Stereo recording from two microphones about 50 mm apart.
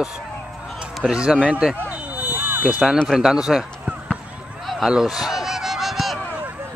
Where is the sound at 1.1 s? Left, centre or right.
Centre.